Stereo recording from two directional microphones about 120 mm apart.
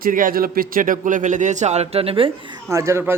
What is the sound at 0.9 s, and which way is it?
A man's voice, 90° right.